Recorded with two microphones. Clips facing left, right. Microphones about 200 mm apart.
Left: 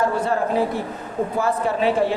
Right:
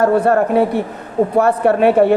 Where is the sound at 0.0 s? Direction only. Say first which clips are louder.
Right 8 dB; 60° right (ahead or behind).